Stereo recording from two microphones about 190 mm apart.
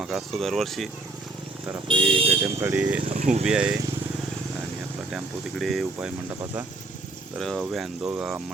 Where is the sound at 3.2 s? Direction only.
40° right (ahead or behind).